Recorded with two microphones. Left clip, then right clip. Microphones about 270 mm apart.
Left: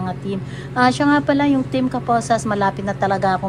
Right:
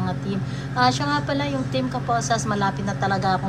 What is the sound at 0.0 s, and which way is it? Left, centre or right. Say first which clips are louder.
A woman's voice: left 2 dB; left.